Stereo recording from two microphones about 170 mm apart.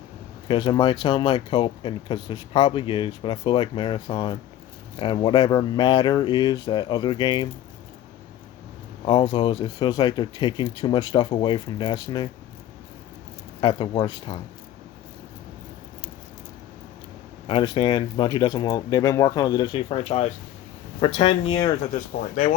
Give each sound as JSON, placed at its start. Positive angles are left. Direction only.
{"t": 0.4, "sound": "speech", "side_deg": 30}
{"t": 9.0, "sound": "speech", "side_deg": 30}
{"t": 13.6, "sound": "speech", "side_deg": 30}
{"t": 17.4, "sound": "speech", "side_deg": 30}
{"t": 22.2, "sound": "speech", "side_deg": 50}